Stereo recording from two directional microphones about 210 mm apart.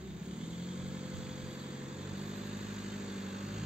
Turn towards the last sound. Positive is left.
turn(degrees=-5)  # may be behind; listen again after turning